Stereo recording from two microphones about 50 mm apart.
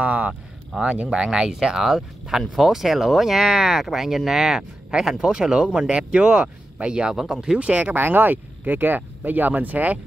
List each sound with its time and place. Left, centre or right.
0.0 s speech: right
1.1 s speech: centre
7.5 s speech: right
7.9 s speech: right